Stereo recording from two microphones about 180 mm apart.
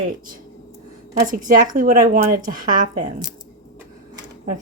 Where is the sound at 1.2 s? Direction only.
50° right (ahead or behind).